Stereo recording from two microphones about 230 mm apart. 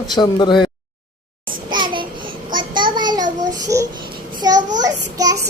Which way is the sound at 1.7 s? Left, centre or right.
Right.